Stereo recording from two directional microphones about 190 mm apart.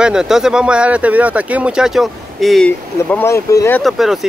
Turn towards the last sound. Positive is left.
turn(degrees=0)  # may be behind; listen again after turning